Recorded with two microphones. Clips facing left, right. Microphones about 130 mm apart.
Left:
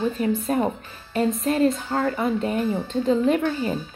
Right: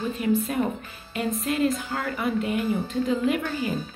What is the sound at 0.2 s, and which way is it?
Speech, 30° left (ahead or behind).